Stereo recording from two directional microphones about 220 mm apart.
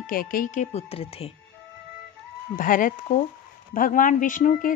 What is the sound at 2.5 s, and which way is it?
Speech, 40° left (ahead or behind).